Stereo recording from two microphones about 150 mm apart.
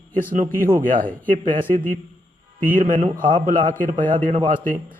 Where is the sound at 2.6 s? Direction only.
65° right (ahead or behind).